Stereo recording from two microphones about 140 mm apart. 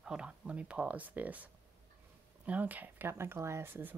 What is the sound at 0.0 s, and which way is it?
Speech, 5° right (ahead or behind).